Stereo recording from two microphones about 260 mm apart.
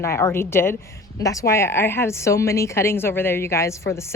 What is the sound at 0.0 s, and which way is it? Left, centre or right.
A woman's voice, centre.